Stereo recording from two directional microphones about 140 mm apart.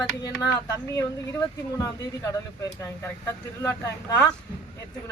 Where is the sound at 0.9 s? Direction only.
20° left (ahead or behind).